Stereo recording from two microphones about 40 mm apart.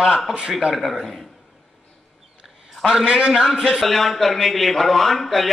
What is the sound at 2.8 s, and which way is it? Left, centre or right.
A man's voice, centre.